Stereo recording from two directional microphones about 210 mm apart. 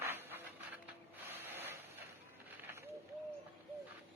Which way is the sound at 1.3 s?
10° right (ahead or behind).